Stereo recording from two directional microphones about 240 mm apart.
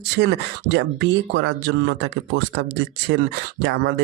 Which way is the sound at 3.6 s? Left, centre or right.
Right.